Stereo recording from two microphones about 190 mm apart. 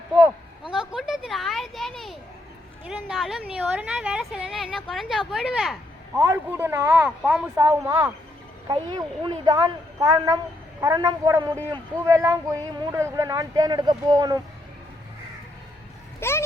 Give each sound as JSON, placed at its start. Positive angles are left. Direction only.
{"t": 0.6, "sound": "children playing", "side_deg": -5}
{"t": 2.8, "sound": "a woman's voice", "side_deg": -5}
{"t": 6.1, "sound": "a woman's voice", "side_deg": -15}
{"t": 16.2, "sound": "a child's voice", "side_deg": 15}